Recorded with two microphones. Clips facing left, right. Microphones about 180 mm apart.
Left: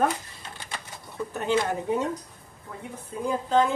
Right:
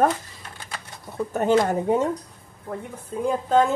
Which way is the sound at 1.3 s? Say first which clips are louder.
Right 7 dB; 45° right (ahead or behind).